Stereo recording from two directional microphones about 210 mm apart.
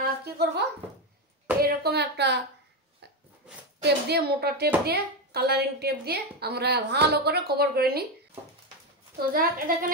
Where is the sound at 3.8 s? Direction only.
50° right (ahead or behind).